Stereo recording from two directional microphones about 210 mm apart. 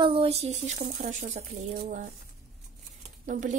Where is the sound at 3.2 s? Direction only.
35° right (ahead or behind).